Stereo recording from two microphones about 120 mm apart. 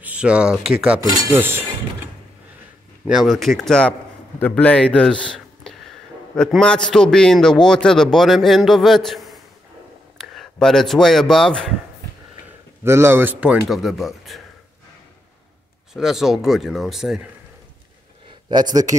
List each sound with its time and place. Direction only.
0.0 s speech: 10° right (ahead or behind)
1.2 s speech: 20° right (ahead or behind)
3.1 s a man's voice: centre (ahead or behind)
12.8 s speech: 20° right (ahead or behind); by 14.4 s centre (ahead or behind)
15.9 s a man's voice: 5° right (ahead or behind)
18.5 s speech: 35° right (ahead or behind)